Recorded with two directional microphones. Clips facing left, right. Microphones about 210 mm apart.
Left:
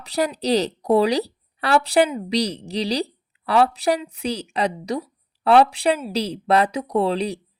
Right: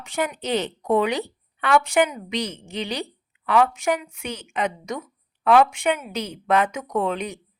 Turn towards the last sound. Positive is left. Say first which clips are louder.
# left 4 dB
turn(degrees=35)  # may be behind; listen again after turning